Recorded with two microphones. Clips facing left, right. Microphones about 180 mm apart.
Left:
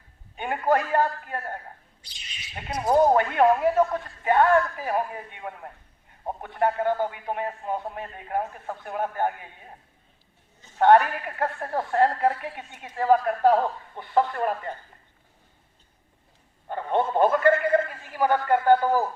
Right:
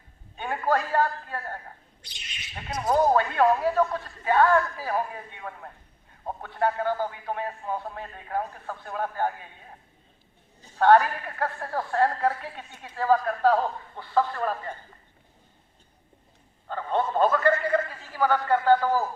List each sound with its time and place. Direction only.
0.3 s a man's voice: 20° left (ahead or behind)
2.6 s speech: 30° left (ahead or behind)
2.9 s a woman's voice: 20° left (ahead or behind)
10.8 s a woman's voice: 20° left (ahead or behind)
16.6 s speech: 15° left (ahead or behind)